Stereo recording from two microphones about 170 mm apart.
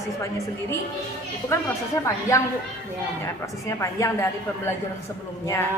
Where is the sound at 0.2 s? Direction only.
20° left (ahead or behind).